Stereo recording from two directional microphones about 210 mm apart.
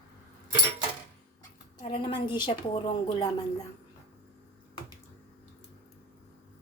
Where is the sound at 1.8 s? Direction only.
25° left (ahead or behind).